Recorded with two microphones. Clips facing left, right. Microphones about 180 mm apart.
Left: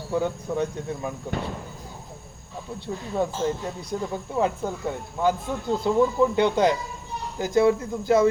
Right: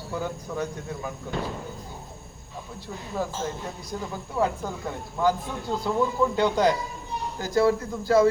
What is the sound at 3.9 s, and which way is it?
Speech, 25° left (ahead or behind).